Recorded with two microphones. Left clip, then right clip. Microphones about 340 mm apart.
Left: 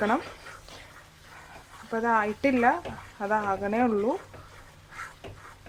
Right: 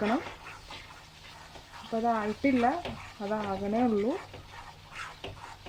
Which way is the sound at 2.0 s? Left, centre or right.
Left.